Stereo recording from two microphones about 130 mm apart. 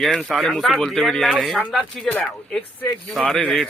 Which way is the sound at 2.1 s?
10° left (ahead or behind).